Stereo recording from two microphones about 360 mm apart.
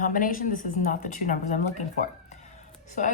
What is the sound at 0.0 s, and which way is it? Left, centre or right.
A woman's voice, left.